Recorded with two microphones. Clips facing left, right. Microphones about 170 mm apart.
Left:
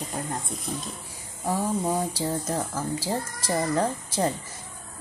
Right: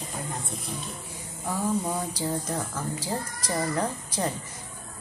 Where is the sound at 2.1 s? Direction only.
30° left (ahead or behind).